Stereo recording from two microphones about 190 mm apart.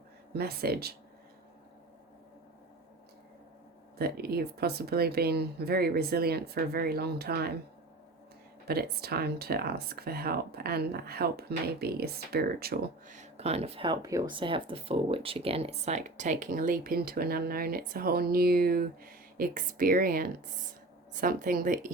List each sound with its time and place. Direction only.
0.3 s speech: 55° right (ahead or behind)
3.9 s speech: 55° right (ahead or behind)
8.6 s speech: 55° right (ahead or behind)